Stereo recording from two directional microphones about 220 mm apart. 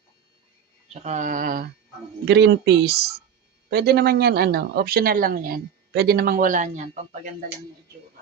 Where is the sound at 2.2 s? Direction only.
50° right (ahead or behind); by 7.2 s 30° right (ahead or behind).